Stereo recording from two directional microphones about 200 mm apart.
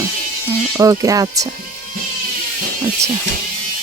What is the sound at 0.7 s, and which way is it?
Music, 15° right (ahead or behind).